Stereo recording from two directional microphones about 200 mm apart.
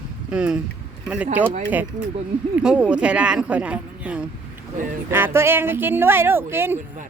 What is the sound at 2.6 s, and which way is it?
Speech, 5° right (ahead or behind).